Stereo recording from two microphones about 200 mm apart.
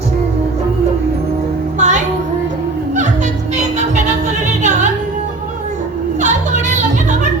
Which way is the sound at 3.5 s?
35° right (ahead or behind).